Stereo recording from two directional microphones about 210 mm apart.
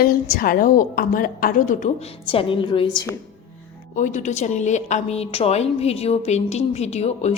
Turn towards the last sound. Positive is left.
turn(degrees=30)  # may be behind; listen again after turning